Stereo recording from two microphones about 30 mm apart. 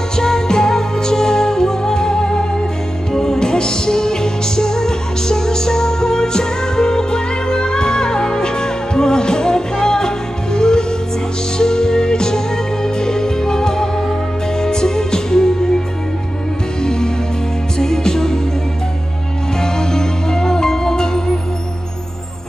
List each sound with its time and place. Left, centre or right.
0.1 s music: left
16.8 s music: left
19.6 s music: left